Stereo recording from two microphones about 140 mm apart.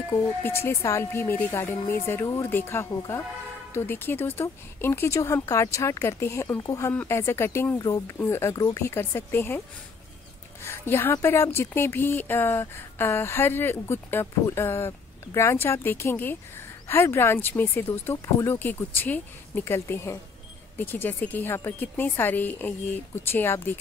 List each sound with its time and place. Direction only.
0.1 s speech: 20° left (ahead or behind)
10.6 s speech: 20° left (ahead or behind)